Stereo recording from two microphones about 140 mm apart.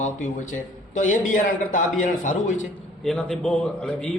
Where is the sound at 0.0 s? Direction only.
65° left (ahead or behind).